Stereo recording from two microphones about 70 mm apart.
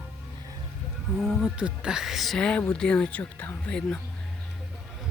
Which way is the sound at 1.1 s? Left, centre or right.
Centre.